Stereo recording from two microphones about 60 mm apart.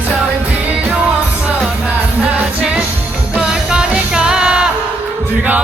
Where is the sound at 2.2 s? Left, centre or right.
Centre.